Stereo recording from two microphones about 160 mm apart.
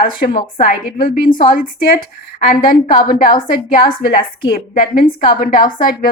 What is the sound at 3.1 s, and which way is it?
Speech, 60° left (ahead or behind).